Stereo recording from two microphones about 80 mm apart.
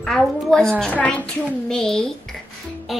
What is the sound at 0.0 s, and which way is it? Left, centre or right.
Speech, centre.